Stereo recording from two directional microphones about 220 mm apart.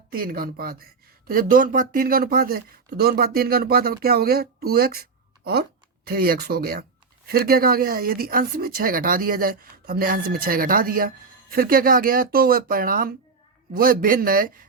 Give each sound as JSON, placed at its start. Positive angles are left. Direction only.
{"t": 0.1, "sound": "speech", "side_deg": -40}
{"t": 6.1, "sound": "speech", "side_deg": -45}